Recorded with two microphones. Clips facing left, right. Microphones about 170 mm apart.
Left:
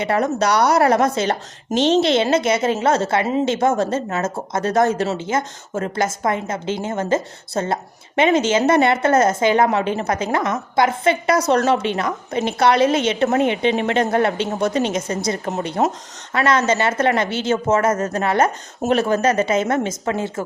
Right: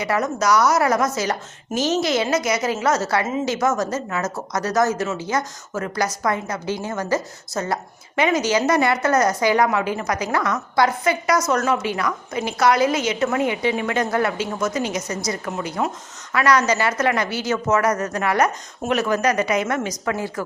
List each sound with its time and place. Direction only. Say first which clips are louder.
0.0 s speech: left 3 dB; 30° left (ahead or behind)